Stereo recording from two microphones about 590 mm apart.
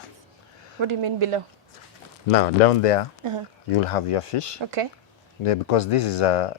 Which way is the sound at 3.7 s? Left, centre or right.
Left.